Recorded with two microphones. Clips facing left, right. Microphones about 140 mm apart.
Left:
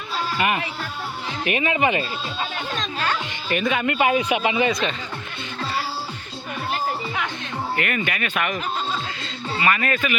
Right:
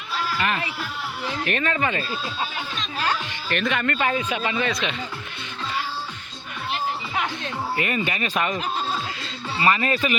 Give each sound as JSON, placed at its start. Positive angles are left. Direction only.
{"t": 0.2, "sound": "music", "side_deg": 25}
{"t": 1.5, "sound": "speech", "side_deg": 10}
{"t": 3.5, "sound": "speech", "side_deg": 5}
{"t": 4.7, "sound": "speech", "side_deg": 0}
{"t": 7.8, "sound": "speech", "side_deg": -25}
{"t": 9.6, "sound": "speech", "side_deg": -30}